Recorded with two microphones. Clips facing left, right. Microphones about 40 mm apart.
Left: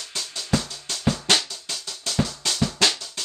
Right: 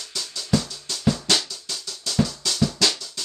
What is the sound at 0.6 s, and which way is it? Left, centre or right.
Music, left.